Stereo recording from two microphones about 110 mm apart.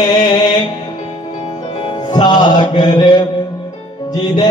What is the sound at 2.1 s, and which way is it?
Music, 40° left (ahead or behind).